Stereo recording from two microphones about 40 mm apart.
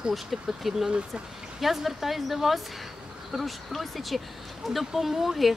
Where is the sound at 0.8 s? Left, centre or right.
Right.